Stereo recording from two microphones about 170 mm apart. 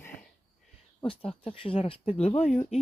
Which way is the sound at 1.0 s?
30° left (ahead or behind).